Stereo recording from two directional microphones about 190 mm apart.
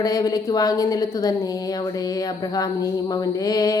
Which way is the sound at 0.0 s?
20° left (ahead or behind).